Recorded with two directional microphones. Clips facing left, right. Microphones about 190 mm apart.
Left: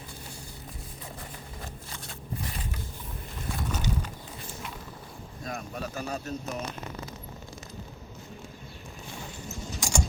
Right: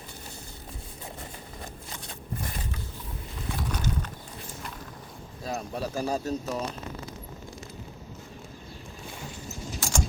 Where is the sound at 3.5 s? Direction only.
5° left (ahead or behind).